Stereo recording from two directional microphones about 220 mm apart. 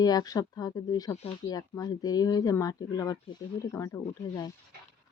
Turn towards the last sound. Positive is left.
turn(degrees=15)  # may be behind; listen again after turning